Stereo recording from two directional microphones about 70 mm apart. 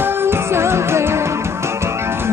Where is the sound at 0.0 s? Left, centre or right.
Right.